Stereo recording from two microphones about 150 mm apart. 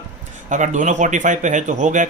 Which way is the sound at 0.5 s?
55° right (ahead or behind).